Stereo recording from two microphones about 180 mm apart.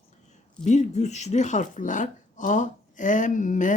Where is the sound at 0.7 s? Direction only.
40° left (ahead or behind).